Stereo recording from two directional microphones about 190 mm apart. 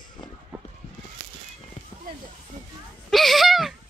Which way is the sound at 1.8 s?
40° left (ahead or behind).